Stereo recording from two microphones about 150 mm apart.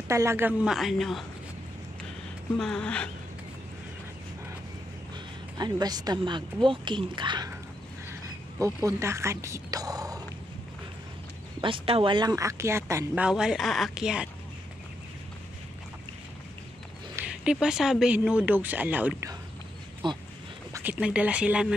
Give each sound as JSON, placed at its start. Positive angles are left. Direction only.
{"t": 0.1, "sound": "a man's voice", "side_deg": -20}
{"t": 2.6, "sound": "a man's voice", "side_deg": 5}
{"t": 5.6, "sound": "a woman's voice", "side_deg": -25}
{"t": 8.5, "sound": "speech", "side_deg": -20}
{"t": 11.6, "sound": "speech", "side_deg": -35}
{"t": 13.2, "sound": "a man's voice", "side_deg": -5}
{"t": 17.1, "sound": "speech", "side_deg": -10}
{"t": 20.0, "sound": "a woman's voice", "side_deg": -30}
{"t": 20.7, "sound": "speech", "side_deg": -10}